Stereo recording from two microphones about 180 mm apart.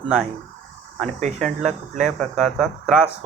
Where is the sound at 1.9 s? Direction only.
40° right (ahead or behind).